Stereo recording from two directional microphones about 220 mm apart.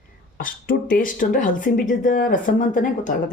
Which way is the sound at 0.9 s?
40° left (ahead or behind).